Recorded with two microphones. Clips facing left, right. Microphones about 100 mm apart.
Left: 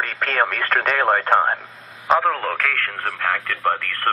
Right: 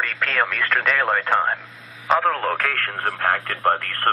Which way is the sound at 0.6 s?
45° left (ahead or behind).